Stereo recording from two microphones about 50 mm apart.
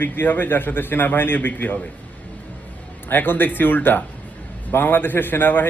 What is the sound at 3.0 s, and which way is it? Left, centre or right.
A man's voice, left.